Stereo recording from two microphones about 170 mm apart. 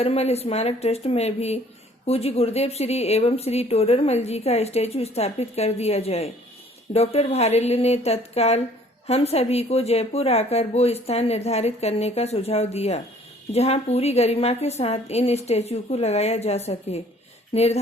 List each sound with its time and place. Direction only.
0.0 s speech: 35° left (ahead or behind)